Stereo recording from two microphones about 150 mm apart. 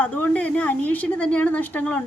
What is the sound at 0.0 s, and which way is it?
A woman's voice, 10° left (ahead or behind).